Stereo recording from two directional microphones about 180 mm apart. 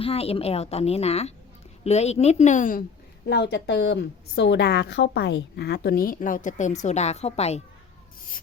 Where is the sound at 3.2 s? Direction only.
70° left (ahead or behind); by 7.6 s 35° left (ahead or behind).